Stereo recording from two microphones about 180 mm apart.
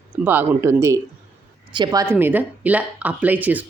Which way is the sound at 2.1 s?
10° right (ahead or behind).